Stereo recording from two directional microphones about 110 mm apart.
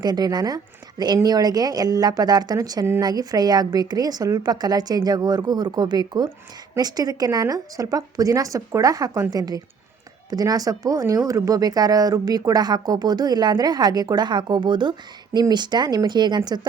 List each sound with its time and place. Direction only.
0.0 s speech: 40° right (ahead or behind)